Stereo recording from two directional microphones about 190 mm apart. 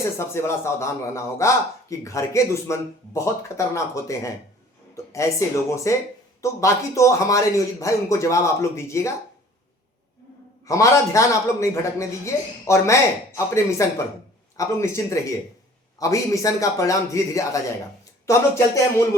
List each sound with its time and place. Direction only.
0.0 s speech: 15° left (ahead or behind)
10.7 s speech: 15° left (ahead or behind)